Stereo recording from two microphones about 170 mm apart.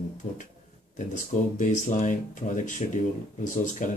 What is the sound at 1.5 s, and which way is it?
Speech, 45° left (ahead or behind).